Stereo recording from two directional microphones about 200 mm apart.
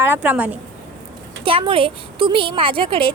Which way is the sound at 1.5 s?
25° right (ahead or behind).